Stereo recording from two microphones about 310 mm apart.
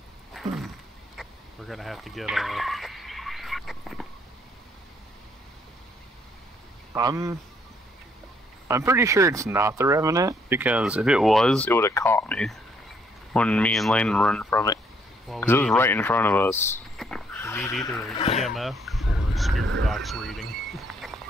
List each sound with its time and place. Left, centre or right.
0.3 s a sound: centre
1.1 s fowl: centre
6.9 s a man's voice: centre
8.6 s speech: centre
18.1 s speech: centre
18.4 s a sound: centre
19.9 s speech: centre